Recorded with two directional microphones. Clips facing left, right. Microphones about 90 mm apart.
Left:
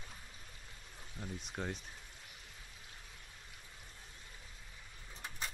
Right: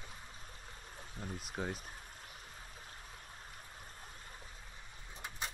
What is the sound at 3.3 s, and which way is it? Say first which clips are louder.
Stream: right 5 dB; 45° right (ahead or behind).